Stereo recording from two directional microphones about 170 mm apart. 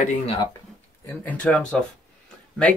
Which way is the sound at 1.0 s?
10° left (ahead or behind).